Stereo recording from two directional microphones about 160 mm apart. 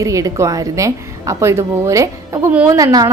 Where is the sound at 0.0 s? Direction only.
20° right (ahead or behind).